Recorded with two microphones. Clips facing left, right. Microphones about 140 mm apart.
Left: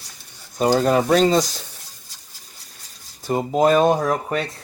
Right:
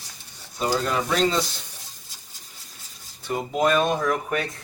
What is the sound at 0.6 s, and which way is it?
Speech, 45° left (ahead or behind).